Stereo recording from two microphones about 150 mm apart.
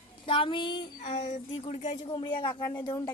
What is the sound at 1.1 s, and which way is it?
Speech, 50° left (ahead or behind).